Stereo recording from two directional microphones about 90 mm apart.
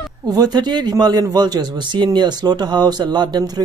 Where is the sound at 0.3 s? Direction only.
45° right (ahead or behind).